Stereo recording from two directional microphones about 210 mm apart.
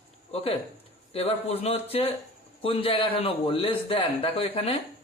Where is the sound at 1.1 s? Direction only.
30° left (ahead or behind).